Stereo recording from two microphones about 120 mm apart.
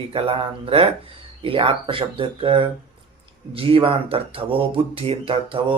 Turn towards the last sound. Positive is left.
turn(degrees=-45)  # may be behind; listen again after turning